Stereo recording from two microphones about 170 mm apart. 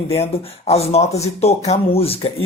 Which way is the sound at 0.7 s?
35° left (ahead or behind).